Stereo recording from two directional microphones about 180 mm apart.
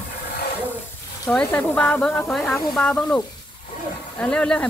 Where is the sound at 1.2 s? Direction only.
10° left (ahead or behind).